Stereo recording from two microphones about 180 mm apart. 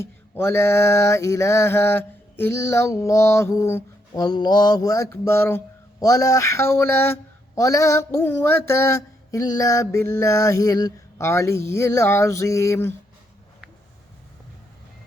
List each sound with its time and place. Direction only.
0.0 s mantra: 10° left (ahead or behind)